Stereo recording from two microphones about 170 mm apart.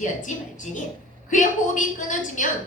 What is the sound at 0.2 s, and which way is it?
A woman's voice, 50° left (ahead or behind).